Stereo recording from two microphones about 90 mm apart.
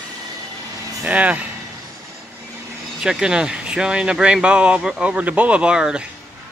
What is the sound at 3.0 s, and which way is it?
Speech, 10° right (ahead or behind).